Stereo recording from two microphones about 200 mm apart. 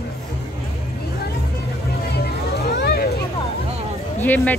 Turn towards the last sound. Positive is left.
turn(degrees=10)  # may be behind; listen again after turning